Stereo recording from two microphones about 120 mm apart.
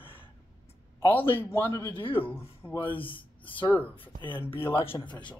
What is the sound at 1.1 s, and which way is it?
A man's voice, 15° left (ahead or behind).